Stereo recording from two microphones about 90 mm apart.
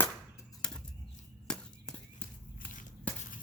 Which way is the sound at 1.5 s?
10° left (ahead or behind).